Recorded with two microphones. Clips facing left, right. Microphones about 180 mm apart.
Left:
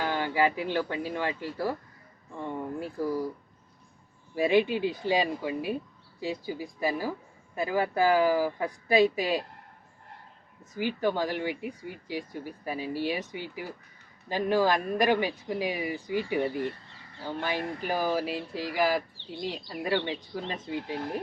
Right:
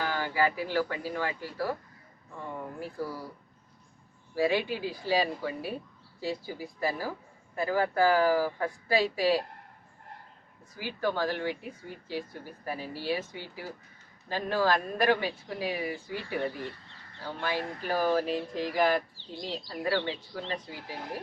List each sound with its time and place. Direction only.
0.0 s speech: 20° left (ahead or behind)
4.4 s speech: 20° left (ahead or behind)
10.8 s speech: 20° left (ahead or behind)
19.7 s speech: 15° left (ahead or behind)